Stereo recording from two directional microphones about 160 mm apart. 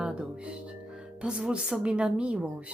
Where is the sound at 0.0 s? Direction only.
5° right (ahead or behind).